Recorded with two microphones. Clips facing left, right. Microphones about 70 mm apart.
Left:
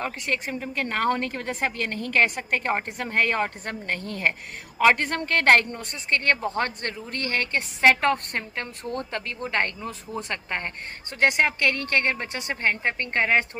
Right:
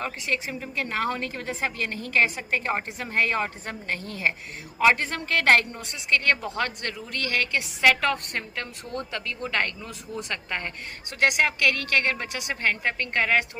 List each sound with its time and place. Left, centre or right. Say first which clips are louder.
0.0 s a woman's voice: left 1 dB; left